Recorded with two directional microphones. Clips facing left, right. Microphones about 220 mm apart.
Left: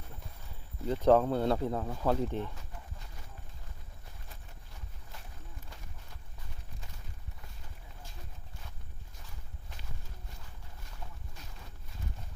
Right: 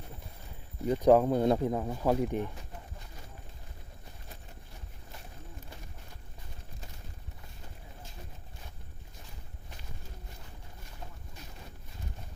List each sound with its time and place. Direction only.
0.9 s speech: 15° right (ahead or behind)